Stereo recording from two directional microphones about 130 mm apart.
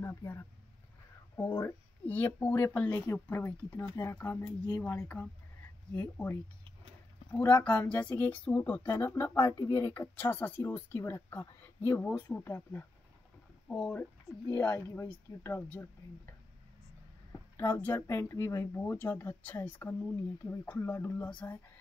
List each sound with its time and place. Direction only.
0.0 s speech: 20° left (ahead or behind)
3.9 s speech: 30° left (ahead or behind)
5.0 s speech: 10° left (ahead or behind)
17.3 s a sound: 15° left (ahead or behind)
17.9 s speech: 25° left (ahead or behind); by 21.5 s 10° left (ahead or behind)